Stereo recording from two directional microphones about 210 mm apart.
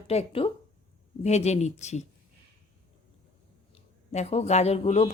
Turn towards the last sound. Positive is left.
turn(degrees=30)  # may be behind; listen again after turning